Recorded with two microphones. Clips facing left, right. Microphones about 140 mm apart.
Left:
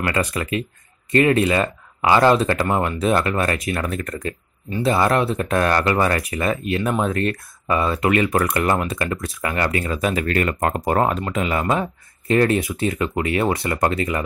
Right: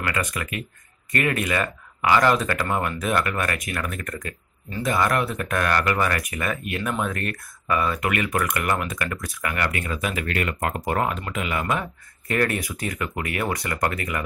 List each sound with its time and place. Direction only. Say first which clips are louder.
0.0 s speech: left 5 dB; 30° left (ahead or behind)